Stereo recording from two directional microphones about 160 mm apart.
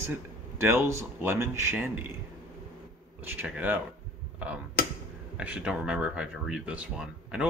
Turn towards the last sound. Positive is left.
turn(degrees=-5)  # may be behind; listen again after turning